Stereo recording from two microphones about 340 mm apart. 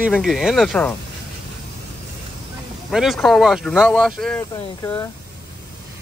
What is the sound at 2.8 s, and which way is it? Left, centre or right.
Speech, centre.